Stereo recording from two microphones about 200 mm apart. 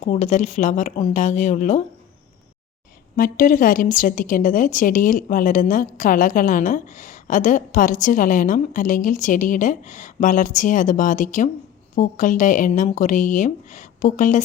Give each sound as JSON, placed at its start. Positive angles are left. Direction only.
{"t": 0.0, "sound": "a woman's voice", "side_deg": 35}
{"t": 3.2, "sound": "a woman's voice", "side_deg": 45}